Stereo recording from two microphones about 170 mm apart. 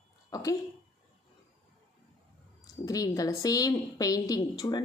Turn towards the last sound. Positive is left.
turn(degrees=20)  # may be behind; listen again after turning